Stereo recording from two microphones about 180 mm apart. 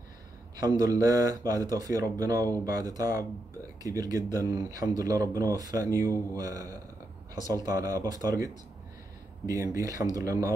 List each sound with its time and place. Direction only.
0.6 s speech: 20° right (ahead or behind)
9.5 s speech: 20° right (ahead or behind)